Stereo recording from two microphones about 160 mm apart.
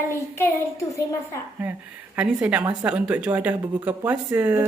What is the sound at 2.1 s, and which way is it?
A woman's voice, 10° right (ahead or behind).